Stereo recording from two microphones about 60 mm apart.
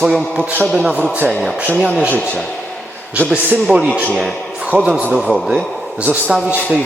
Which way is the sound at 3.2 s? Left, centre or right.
Centre.